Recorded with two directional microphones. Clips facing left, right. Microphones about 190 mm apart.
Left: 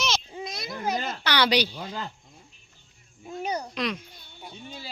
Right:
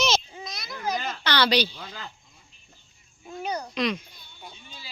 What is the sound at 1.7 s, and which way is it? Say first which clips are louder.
Speech: left 6 dB; 45° left (ahead or behind).